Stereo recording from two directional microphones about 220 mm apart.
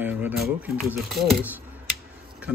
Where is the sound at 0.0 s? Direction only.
10° right (ahead or behind).